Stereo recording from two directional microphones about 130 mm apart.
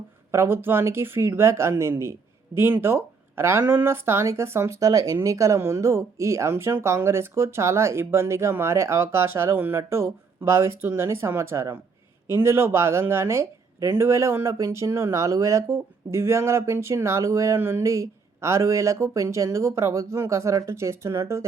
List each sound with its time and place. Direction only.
0.3 s speech: 20° right (ahead or behind)